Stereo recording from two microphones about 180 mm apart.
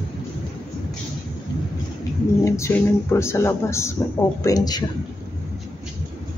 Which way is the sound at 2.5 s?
15° left (ahead or behind).